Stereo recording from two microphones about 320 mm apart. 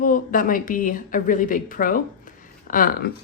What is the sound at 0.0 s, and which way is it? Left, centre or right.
A woman's voice, left.